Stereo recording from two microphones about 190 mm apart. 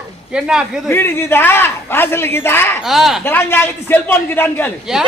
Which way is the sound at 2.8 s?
Centre (ahead or behind).